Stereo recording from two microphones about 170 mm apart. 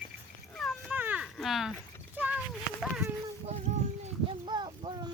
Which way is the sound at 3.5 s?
40° right (ahead or behind).